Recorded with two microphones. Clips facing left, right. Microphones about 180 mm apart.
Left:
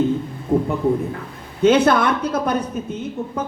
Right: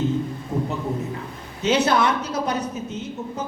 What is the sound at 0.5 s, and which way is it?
A man's voice, 55° left (ahead or behind).